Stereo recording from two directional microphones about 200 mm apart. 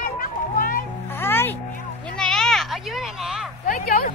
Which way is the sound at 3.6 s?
45° left (ahead or behind).